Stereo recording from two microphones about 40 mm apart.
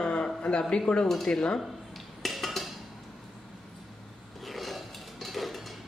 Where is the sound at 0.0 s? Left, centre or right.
Left.